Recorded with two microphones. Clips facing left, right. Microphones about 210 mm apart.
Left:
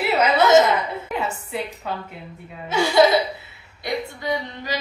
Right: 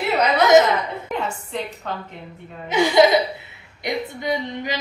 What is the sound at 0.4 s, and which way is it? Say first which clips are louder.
Speech: right 1 dB; 15° right (ahead or behind).